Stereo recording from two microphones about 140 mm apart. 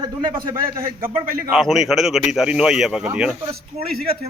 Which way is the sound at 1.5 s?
Centre (ahead or behind).